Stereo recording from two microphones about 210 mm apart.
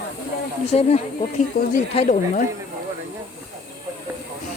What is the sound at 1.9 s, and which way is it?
Speech, 30° left (ahead or behind).